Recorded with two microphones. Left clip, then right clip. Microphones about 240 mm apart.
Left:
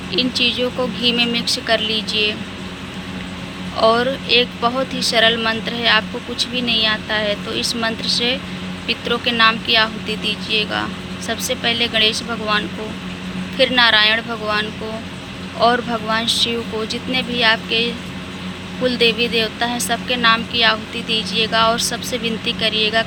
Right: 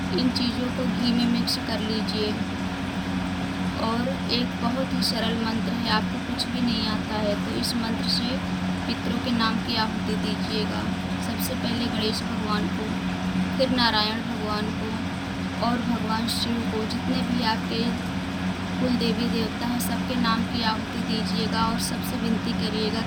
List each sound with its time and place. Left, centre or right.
0.1 s speech: centre
3.8 s speech: centre
15.6 s speech: centre
18.9 s speech: centre